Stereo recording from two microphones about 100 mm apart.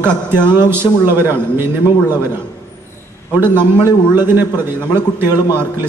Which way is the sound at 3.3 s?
20° right (ahead or behind).